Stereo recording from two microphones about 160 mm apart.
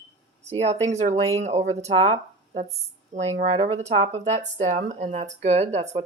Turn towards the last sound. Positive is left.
turn(degrees=-45)  # may be behind; listen again after turning